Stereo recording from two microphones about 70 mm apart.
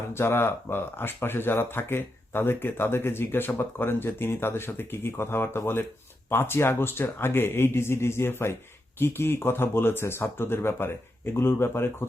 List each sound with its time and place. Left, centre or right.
0.1 s speech: left